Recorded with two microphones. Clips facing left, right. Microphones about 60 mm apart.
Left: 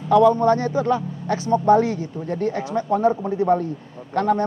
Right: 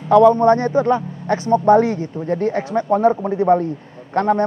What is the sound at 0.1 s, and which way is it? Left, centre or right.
A man's voice, right.